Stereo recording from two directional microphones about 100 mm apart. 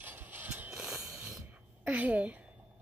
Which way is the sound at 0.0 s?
20° right (ahead or behind).